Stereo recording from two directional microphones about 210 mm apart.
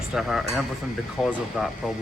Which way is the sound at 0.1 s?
Centre (ahead or behind).